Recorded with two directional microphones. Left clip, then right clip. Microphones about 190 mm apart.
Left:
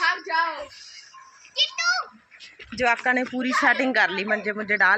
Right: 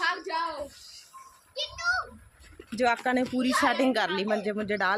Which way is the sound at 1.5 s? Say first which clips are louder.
Left 6 dB; 60° right (ahead or behind).